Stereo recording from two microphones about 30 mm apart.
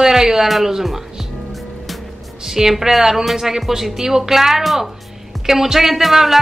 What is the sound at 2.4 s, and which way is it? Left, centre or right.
Speech, centre.